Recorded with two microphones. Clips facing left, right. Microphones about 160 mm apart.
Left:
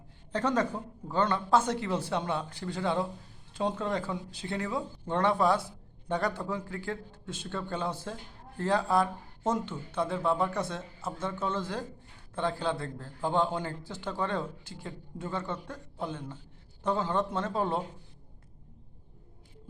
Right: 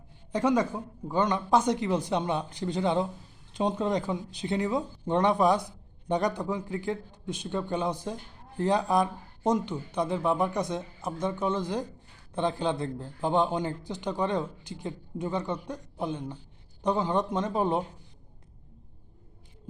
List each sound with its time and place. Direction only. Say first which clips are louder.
0.3 s speech: right 3 dB; 10° right (ahead or behind)